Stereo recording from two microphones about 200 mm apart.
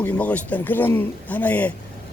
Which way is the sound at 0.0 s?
10° left (ahead or behind).